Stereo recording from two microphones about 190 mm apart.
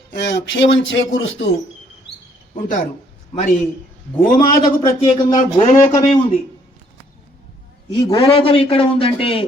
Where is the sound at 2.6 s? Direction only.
45° left (ahead or behind).